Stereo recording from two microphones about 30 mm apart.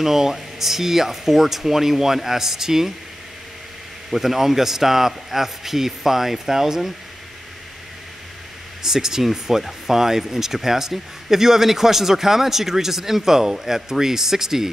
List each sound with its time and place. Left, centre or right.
0.0 s speech: centre
4.1 s speech: centre
8.8 s speech: centre